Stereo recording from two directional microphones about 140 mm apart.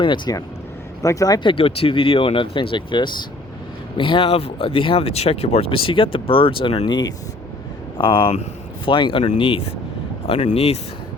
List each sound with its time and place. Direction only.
0.0 s speech: 30° left (ahead or behind)